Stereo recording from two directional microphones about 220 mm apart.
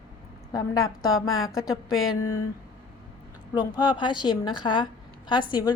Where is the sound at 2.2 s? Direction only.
90° left.